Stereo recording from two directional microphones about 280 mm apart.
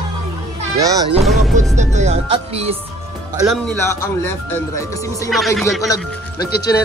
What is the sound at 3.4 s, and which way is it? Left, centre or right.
Speech, centre.